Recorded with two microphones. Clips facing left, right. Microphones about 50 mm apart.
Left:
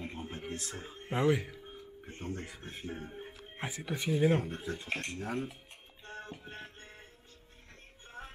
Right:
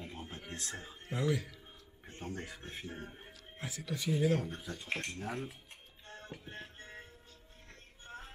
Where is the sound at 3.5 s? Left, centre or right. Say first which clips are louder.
Left 3 dB; left.